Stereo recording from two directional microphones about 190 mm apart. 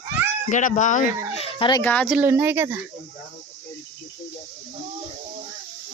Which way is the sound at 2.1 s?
10° right (ahead or behind).